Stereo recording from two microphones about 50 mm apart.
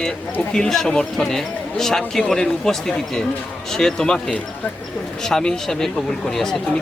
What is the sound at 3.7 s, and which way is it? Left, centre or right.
Speech, centre.